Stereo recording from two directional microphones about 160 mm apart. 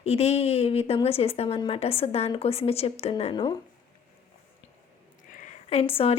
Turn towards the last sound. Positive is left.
turn(degrees=35)  # may be behind; listen again after turning